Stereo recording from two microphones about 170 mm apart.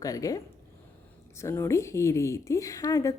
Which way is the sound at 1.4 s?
15° left (ahead or behind).